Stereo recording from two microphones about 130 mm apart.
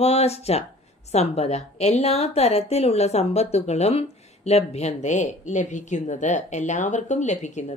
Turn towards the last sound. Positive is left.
turn(degrees=65)  # may be behind; listen again after turning